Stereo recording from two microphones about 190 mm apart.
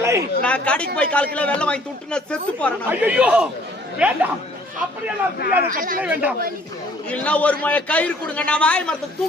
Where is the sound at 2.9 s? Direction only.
5° right (ahead or behind).